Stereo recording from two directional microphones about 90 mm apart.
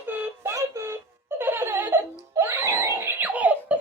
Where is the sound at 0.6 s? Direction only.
30° right (ahead or behind).